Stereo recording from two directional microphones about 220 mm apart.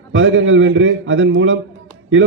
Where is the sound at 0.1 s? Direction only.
60° right (ahead or behind).